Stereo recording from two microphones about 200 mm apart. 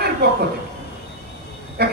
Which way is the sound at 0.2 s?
55° right (ahead or behind).